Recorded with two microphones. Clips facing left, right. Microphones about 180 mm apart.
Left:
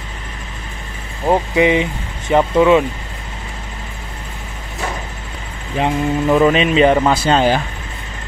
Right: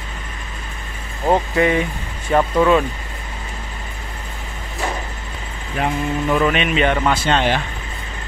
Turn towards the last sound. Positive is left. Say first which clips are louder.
# left 4 dB
turn(degrees=40)  # may be behind; listen again after turning